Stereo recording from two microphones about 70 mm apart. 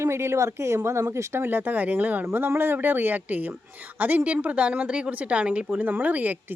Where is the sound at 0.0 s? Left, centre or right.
Right.